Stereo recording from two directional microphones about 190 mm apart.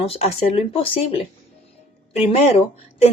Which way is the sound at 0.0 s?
35° left (ahead or behind).